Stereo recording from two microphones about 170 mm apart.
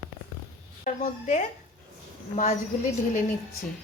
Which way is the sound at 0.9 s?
45° left (ahead or behind).